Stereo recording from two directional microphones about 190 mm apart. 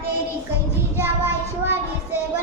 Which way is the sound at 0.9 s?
10° right (ahead or behind).